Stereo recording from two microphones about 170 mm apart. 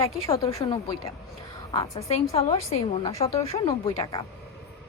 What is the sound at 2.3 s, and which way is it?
Speech, 35° left (ahead or behind).